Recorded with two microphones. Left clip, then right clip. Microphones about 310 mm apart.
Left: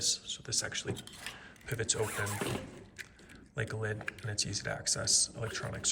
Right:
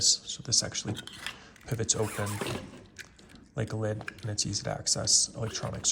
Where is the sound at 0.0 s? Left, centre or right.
Centre.